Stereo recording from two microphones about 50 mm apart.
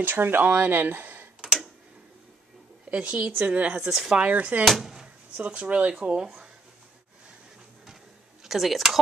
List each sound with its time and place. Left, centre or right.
0.0 s speech: right
1.4 s tick-tock: centre
2.9 s speech: right
3.8 s speech: centre
4.2 s speech: right
4.6 s a sound: centre
5.4 s speech: right; by 6.5 s centre
8.5 s speech: centre